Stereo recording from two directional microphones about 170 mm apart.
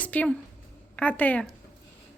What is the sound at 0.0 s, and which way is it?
A woman's voice, 10° left (ahead or behind).